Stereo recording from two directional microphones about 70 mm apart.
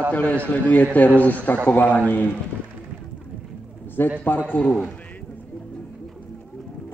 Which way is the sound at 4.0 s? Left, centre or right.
Left.